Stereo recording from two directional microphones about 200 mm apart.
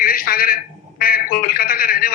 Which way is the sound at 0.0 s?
45° left (ahead or behind).